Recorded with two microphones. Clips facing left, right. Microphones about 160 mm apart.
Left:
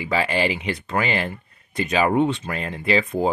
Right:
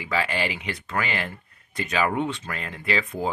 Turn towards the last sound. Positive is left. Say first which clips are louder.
# left 6 dB
turn(degrees=25)  # may be behind; listen again after turning